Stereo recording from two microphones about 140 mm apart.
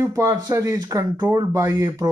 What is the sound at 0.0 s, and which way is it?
Speech, 20° right (ahead or behind).